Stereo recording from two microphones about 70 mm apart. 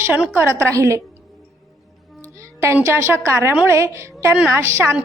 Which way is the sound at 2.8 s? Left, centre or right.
Right.